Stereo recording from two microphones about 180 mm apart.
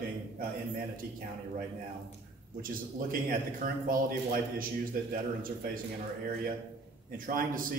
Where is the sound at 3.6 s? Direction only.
50° right (ahead or behind).